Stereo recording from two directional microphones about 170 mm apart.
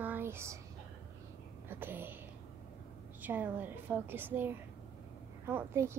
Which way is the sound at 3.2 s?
10° right (ahead or behind).